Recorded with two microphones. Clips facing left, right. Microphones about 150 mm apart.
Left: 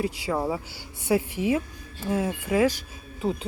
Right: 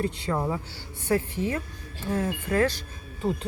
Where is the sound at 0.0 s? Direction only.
5° left (ahead or behind).